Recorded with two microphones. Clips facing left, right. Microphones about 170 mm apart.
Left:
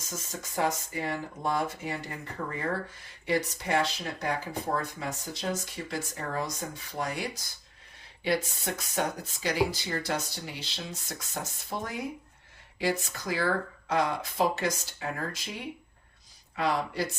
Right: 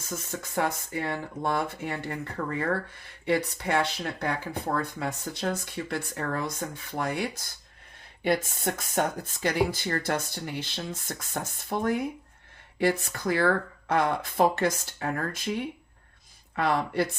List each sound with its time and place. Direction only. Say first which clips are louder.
0.0 s speech: right 4 dB; 60° right (ahead or behind)
16.6 s speech: right 3 dB; 55° right (ahead or behind)